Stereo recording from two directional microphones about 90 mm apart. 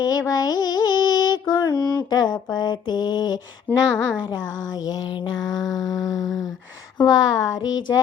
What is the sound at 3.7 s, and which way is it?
Speech, 15° left (ahead or behind).